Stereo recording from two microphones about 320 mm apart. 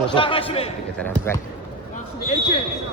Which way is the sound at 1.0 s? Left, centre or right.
Centre.